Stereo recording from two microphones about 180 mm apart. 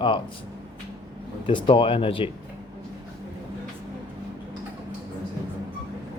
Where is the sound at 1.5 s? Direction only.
25° left (ahead or behind).